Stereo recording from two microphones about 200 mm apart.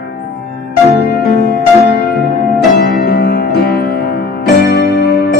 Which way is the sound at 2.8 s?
55° left (ahead or behind).